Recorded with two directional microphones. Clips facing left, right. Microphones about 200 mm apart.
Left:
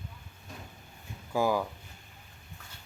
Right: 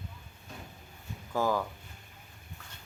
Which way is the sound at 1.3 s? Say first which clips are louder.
Left 2 dB; 10° left (ahead or behind).